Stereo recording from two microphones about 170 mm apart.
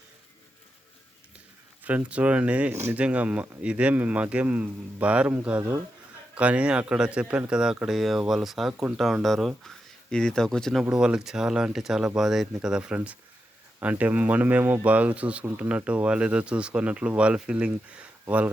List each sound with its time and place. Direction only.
1.8 s speech: 10° right (ahead or behind)